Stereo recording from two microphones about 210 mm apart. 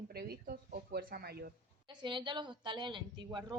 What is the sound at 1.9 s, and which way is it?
A woman's voice, 20° right (ahead or behind).